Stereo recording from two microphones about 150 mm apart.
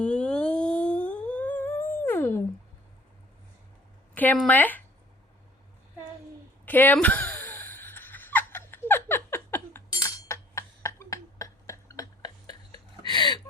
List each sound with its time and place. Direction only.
0.0 s humming: 5° left (ahead or behind)
4.1 s speech: 10° left (ahead or behind)
6.7 s speech: 10° left (ahead or behind)
6.9 s a sound: 10° left (ahead or behind); by 13.4 s 30° left (ahead or behind)